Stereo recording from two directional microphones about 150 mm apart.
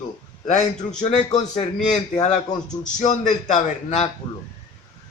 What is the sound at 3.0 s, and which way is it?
A man's voice, 55° left (ahead or behind).